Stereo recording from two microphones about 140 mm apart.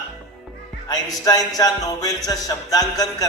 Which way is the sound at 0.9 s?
25° left (ahead or behind).